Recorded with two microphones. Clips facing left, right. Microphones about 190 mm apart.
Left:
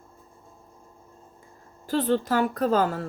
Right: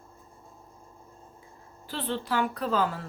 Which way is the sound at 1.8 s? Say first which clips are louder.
Left 8 dB; 45° left (ahead or behind).